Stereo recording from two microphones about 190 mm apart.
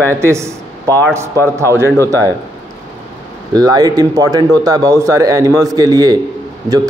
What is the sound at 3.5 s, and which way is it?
A man's voice, 20° right (ahead or behind).